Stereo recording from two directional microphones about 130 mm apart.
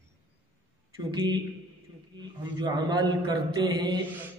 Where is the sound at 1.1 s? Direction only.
35° right (ahead or behind).